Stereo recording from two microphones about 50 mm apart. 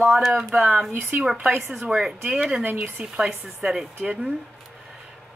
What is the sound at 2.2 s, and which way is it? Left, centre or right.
Speech, right.